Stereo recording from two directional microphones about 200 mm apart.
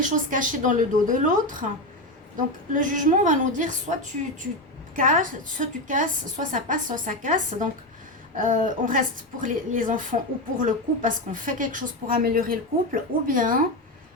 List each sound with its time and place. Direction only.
0.0 s a woman's voice: 40° right (ahead or behind)
4.9 s a woman's voice: 40° right (ahead or behind)